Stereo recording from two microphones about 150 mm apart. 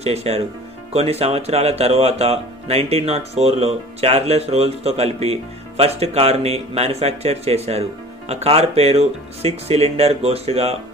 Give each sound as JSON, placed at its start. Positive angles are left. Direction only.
{"t": 0.0, "sound": "speech", "side_deg": -45}